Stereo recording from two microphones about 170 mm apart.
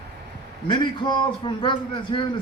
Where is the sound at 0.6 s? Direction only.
25° left (ahead or behind).